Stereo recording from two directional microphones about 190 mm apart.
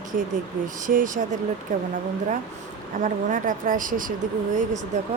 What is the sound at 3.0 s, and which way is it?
A woman's voice, 45° right (ahead or behind).